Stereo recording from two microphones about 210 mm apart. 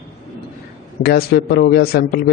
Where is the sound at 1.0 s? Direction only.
45° left (ahead or behind).